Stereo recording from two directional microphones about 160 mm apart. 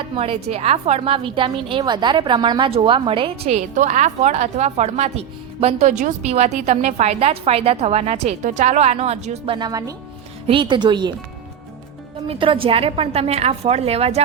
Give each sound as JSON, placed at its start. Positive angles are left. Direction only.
{"t": 0.2, "sound": "a woman's voice", "side_deg": -40}
{"t": 9.6, "sound": "speech", "side_deg": -25}
{"t": 12.3, "sound": "a woman's voice", "side_deg": -35}